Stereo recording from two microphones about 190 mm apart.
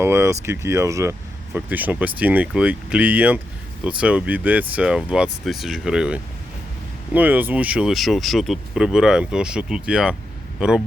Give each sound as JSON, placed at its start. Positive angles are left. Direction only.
{"t": 0.0, "sound": "speech", "side_deg": -15}